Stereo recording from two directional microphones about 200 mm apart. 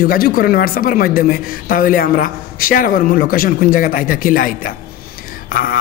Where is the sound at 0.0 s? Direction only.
45° left (ahead or behind).